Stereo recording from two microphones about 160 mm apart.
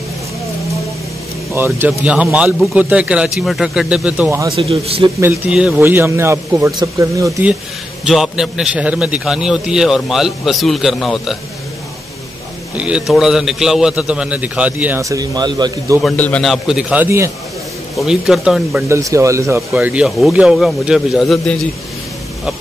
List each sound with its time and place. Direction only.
1.5 s a man's voice: 15° right (ahead or behind)
4.6 s a man's voice: 35° right (ahead or behind)
5.5 s a man's voice: 5° right (ahead or behind)
8.0 s a man's voice: centre (ahead or behind)
12.7 s a man's voice: 5° right (ahead or behind); by 16.0 s 25° right (ahead or behind)
16.0 s a man's voice: 5° left (ahead or behind); by 17.3 s 15° right (ahead or behind)
17.9 s a man's voice: centre (ahead or behind)
18.9 s a man's voice: 20° right (ahead or behind); by 21.5 s centre (ahead or behind)